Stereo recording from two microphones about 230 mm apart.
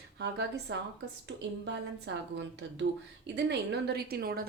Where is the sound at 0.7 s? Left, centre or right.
Right.